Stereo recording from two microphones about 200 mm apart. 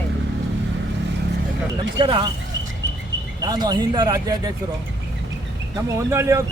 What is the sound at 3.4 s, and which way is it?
Speech, 20° right (ahead or behind).